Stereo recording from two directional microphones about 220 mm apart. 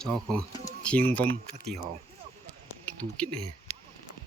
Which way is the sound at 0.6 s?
5° left (ahead or behind).